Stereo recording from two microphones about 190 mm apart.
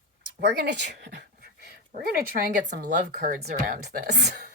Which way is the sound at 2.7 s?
45° right (ahead or behind).